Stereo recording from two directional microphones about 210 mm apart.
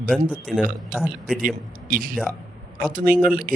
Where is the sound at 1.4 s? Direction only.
40° right (ahead or behind).